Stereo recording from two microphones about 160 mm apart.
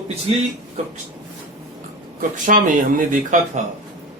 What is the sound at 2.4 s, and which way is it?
Speech, 55° right (ahead or behind).